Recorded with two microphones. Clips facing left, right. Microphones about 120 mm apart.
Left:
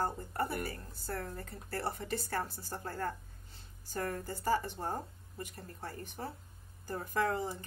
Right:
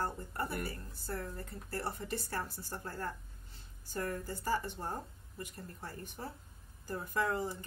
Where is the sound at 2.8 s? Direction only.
50° left (ahead or behind).